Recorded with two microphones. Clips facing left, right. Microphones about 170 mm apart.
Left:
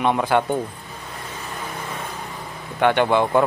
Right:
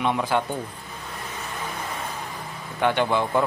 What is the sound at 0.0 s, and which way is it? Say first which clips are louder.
Speech: left 4 dB; 60° left (ahead or behind).